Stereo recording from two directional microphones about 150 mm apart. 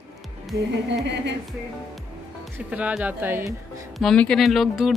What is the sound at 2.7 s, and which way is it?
Speech, 10° right (ahead or behind).